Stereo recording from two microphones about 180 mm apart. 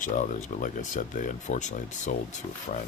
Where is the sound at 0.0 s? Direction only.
45° left (ahead or behind).